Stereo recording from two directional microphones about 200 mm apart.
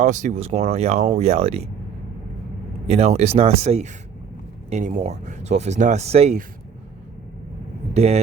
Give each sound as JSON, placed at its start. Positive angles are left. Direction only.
{"t": 0.0, "sound": "speech", "side_deg": -35}
{"t": 2.8, "sound": "speech", "side_deg": -35}
{"t": 7.9, "sound": "speech", "side_deg": -35}